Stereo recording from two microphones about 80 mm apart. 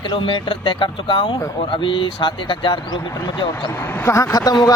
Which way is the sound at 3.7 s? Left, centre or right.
Left.